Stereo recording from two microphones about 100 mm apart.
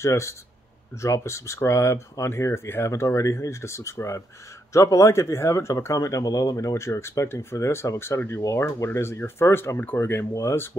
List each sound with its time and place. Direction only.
0.0 s speech: 30° left (ahead or behind)